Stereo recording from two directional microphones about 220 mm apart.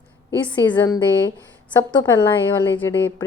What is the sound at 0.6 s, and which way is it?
Speech, 10° left (ahead or behind).